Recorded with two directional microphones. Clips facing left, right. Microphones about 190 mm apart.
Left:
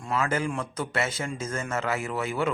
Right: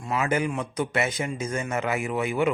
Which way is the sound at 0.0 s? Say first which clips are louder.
Right 2 dB; 10° right (ahead or behind).